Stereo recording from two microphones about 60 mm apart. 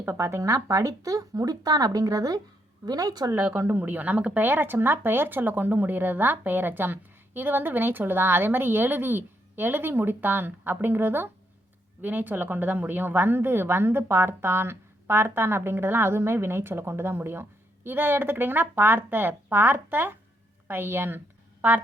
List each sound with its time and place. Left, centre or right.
0.0 s speech: right
2.9 s speech: right
3.7 s speech: right